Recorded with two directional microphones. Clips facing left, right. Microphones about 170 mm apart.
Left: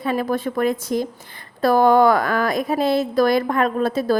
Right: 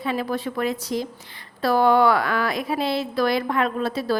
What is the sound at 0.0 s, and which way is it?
A woman's voice, 50° left (ahead or behind).